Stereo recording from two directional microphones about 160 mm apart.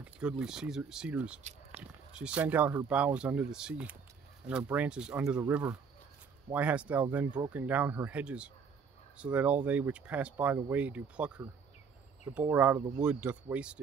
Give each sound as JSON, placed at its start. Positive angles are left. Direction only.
{"t": 0.0, "sound": "speech", "side_deg": -5}
{"t": 1.8, "sound": "a sound", "side_deg": -40}
{"t": 2.1, "sound": "speech", "side_deg": -5}